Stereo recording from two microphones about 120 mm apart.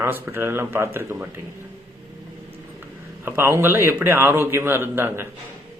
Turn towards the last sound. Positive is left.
turn(degrees=-20)  # may be behind; listen again after turning